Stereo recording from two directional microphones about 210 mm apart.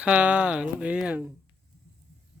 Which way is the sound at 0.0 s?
5° right (ahead or behind).